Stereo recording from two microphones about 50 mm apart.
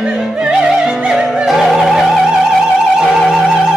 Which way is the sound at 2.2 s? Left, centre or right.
Centre.